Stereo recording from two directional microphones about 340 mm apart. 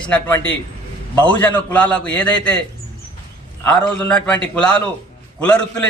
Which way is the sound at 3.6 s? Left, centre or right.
Centre.